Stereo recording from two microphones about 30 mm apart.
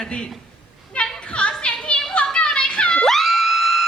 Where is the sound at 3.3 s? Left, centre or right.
Centre.